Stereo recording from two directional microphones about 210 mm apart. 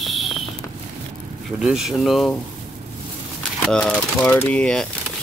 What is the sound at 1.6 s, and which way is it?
Speech, centre (ahead or behind).